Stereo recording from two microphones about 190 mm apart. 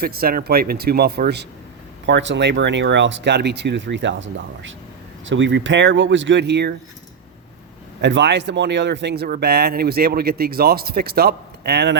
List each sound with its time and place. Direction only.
0.0 s speech: 50° right (ahead or behind)
8.0 s speech: 65° right (ahead or behind)